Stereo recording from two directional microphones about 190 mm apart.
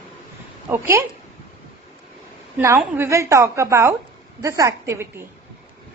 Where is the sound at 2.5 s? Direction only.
15° right (ahead or behind).